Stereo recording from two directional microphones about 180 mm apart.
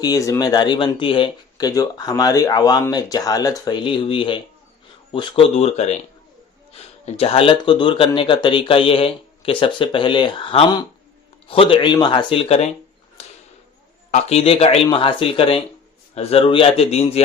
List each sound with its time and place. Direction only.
0.0 s speech: 20° left (ahead or behind); by 6.0 s 35° left (ahead or behind)
7.0 s speech: 35° left (ahead or behind)
13.2 s a sound: 35° left (ahead or behind)
14.1 s speech: 40° left (ahead or behind)